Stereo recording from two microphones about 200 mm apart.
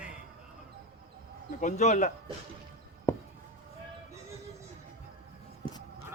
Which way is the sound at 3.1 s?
10° left (ahead or behind).